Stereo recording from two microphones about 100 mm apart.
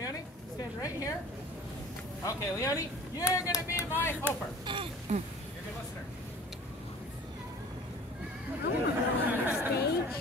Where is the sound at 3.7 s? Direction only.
20° right (ahead or behind).